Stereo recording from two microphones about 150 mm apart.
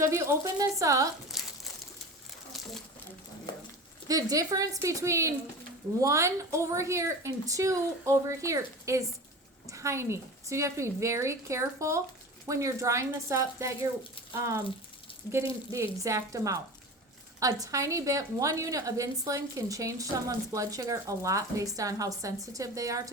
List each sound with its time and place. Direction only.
0.0 s a woman's voice: 20° right (ahead or behind)
1.3 s crumpling: centre (ahead or behind)
4.1 s a woman's voice: 25° right (ahead or behind)
15.7 s a woman's voice: 20° right (ahead or behind)